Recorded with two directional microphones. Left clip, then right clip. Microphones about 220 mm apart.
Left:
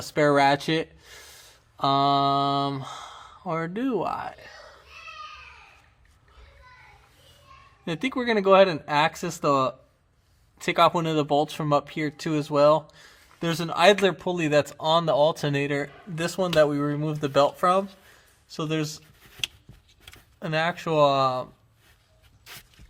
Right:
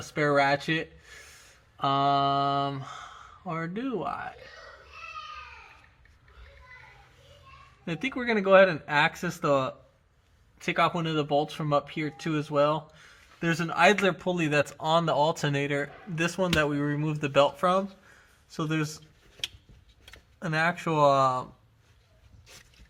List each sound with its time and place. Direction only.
0.1 s speech: 30° left (ahead or behind)
7.9 s speech: 25° left (ahead or behind)
20.4 s speech: 20° left (ahead or behind)